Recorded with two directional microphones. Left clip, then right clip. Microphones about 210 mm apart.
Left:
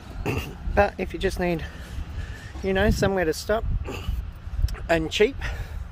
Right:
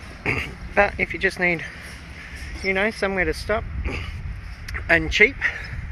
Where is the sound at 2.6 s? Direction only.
40° left (ahead or behind).